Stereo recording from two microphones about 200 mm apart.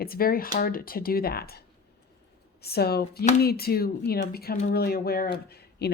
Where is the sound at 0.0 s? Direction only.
50° left (ahead or behind).